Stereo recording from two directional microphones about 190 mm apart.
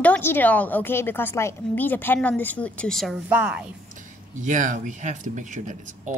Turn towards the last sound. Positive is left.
turn(degrees=-40)  # may be behind; listen again after turning